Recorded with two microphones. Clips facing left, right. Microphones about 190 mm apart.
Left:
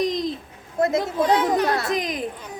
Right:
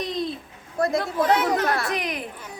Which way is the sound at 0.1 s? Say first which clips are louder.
Left 2 dB; 90° left.